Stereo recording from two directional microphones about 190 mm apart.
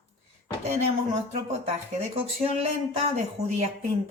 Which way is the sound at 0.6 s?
35° right (ahead or behind).